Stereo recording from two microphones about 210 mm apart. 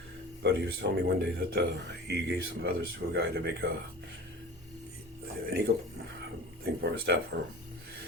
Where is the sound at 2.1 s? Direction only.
50° right (ahead or behind).